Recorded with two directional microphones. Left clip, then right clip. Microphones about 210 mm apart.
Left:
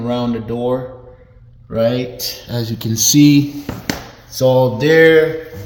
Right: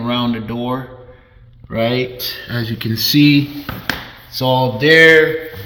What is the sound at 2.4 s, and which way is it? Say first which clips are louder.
Speech: right 1 dB; 10° right (ahead or behind).